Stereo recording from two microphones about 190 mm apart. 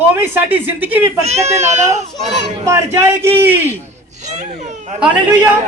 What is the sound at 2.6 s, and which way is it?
Speech, 15° right (ahead or behind).